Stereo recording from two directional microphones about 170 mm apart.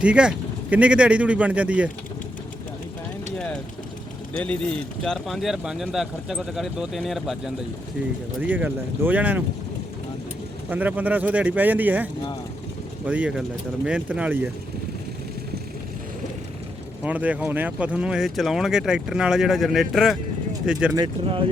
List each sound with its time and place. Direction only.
0.0 s speech: 5° right (ahead or behind)
3.3 s vehicle: 5° left (ahead or behind)
4.4 s speech: 5° left (ahead or behind); by 9.4 s 10° right (ahead or behind)
10.7 s speech: 10° right (ahead or behind)
13.1 s speech: 5° right (ahead or behind)
17.0 s speech: 10° right (ahead or behind)
20.9 s speech: 30° right (ahead or behind)